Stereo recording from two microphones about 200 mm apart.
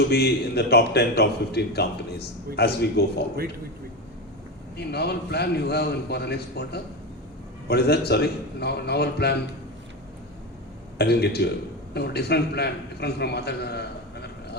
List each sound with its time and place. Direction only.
0.1 s a man's voice: 55° left (ahead or behind)
4.8 s a man's voice: 55° left (ahead or behind)
10.9 s a man's voice: 55° left (ahead or behind)